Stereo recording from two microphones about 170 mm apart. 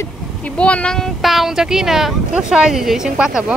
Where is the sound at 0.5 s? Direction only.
5° left (ahead or behind).